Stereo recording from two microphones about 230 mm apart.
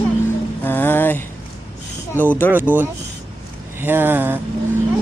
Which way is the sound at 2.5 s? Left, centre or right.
Centre.